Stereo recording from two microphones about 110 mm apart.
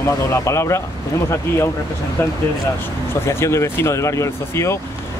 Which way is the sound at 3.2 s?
25° left (ahead or behind).